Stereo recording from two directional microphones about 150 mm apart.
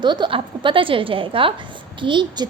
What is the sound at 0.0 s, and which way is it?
A woman's voice, 30° right (ahead or behind).